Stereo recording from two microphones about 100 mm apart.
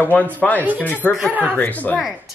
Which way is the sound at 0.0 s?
15° left (ahead or behind).